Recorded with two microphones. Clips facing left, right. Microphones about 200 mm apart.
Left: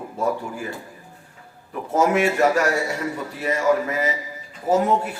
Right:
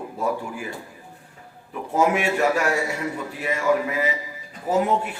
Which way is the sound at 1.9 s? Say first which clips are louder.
Left 2 dB; 40° left (ahead or behind).